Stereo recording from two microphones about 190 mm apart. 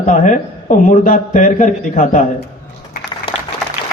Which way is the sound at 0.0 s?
45° left (ahead or behind).